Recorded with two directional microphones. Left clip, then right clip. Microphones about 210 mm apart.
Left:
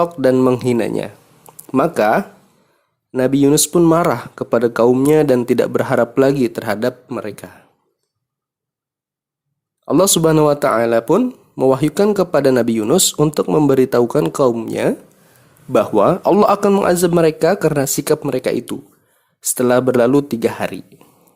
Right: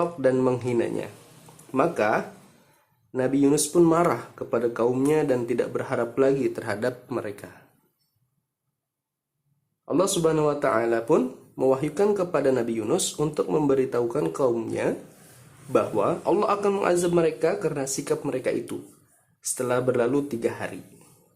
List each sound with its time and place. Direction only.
0.0 s speech: 45° left (ahead or behind)
9.8 s speech: 50° left (ahead or behind)